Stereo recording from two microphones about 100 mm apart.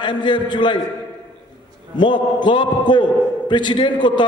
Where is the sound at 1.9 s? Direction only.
50° left (ahead or behind).